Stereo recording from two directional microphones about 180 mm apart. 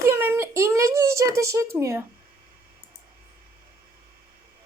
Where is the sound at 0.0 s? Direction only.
15° right (ahead or behind).